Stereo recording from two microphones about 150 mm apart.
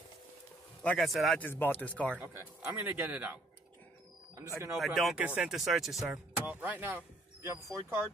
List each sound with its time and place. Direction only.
0.8 s a man's voice: centre (ahead or behind)
1.4 s speech: 15° left (ahead or behind)
2.1 s speech: 20° right (ahead or behind)
4.4 s speech: 20° right (ahead or behind)
4.7 s speech: centre (ahead or behind); by 8.1 s 15° right (ahead or behind)